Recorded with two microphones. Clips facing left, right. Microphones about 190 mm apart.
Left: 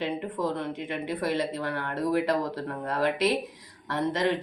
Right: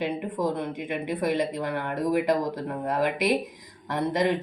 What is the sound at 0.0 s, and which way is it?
Speech, 15° right (ahead or behind).